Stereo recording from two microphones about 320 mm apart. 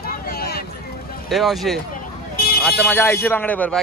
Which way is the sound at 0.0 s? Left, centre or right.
Left.